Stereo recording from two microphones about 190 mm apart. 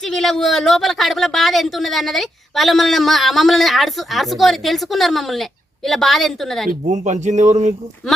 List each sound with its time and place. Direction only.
0.0 s a woman's voice: centre (ahead or behind)
6.7 s speech: 40° right (ahead or behind)